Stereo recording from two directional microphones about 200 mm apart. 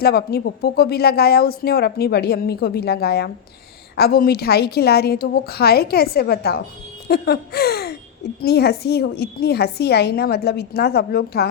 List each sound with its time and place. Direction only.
0.0 s speech: 50° left (ahead or behind)